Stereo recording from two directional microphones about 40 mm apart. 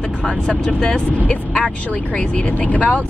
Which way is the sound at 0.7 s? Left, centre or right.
Centre.